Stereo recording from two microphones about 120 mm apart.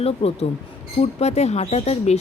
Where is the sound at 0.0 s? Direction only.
60° left (ahead or behind).